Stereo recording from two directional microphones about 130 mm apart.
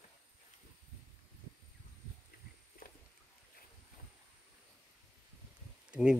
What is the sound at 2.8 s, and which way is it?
Boat, 90° left.